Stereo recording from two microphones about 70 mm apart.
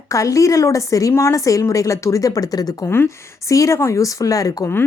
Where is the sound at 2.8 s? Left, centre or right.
Left.